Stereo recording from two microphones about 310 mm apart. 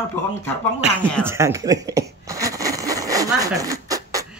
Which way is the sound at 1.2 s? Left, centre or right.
Centre.